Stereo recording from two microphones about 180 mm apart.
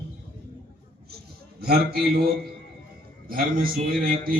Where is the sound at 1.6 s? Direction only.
60° right (ahead or behind).